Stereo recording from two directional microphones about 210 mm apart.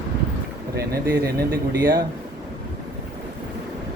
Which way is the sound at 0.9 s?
45° right (ahead or behind).